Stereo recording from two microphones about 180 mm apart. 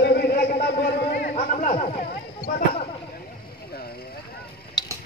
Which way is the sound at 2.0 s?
60° left (ahead or behind).